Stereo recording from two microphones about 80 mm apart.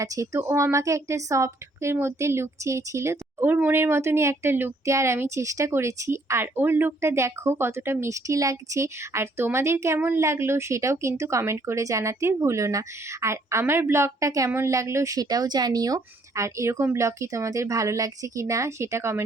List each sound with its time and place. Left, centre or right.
0.0 s speech: right
16.3 s speech: right